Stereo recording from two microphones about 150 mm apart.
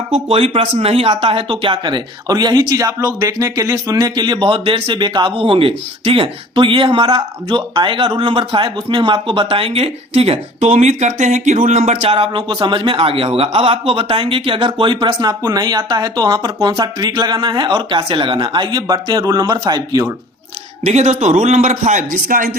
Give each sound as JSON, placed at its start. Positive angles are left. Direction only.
{"t": 0.3, "sound": "speech", "side_deg": -40}
{"t": 12.1, "sound": "speech", "side_deg": -35}
{"t": 20.8, "sound": "a man's voice", "side_deg": -45}